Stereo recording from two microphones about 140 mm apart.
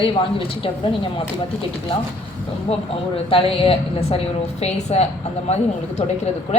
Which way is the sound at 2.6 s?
45° left (ahead or behind).